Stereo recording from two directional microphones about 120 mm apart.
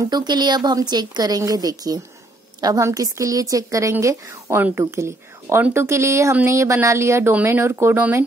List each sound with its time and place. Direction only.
0.1 s a woman's voice: 35° right (ahead or behind); by 8.2 s 20° right (ahead or behind)